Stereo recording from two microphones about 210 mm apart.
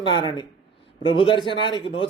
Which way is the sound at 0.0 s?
20° left (ahead or behind).